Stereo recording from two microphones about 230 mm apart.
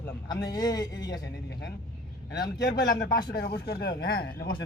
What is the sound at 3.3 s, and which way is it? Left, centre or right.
Speech, left.